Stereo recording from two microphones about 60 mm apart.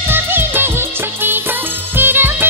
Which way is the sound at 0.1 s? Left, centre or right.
Right.